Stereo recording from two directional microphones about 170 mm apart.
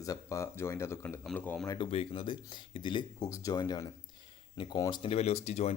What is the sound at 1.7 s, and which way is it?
Speech, 30° left (ahead or behind).